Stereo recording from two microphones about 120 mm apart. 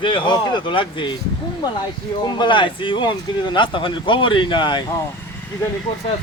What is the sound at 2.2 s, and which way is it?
Speech, 40° left (ahead or behind).